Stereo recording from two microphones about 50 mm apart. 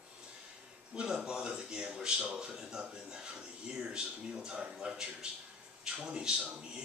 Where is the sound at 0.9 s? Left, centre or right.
Centre.